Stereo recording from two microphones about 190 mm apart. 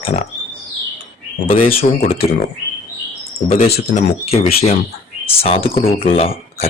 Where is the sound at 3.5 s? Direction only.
30° left (ahead or behind).